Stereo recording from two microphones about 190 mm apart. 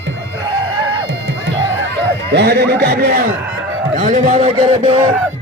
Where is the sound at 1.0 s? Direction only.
70° right (ahead or behind).